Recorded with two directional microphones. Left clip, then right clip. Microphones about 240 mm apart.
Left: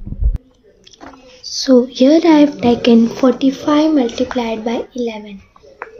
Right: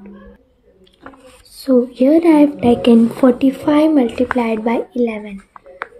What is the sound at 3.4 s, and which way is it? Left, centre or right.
A woman's voice, right.